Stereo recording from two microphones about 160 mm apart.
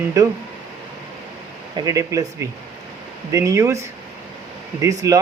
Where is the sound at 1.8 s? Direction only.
20° right (ahead or behind).